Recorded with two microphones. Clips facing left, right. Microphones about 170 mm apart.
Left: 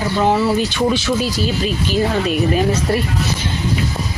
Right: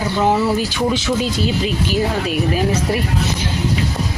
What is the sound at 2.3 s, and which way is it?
Speech, 5° right (ahead or behind).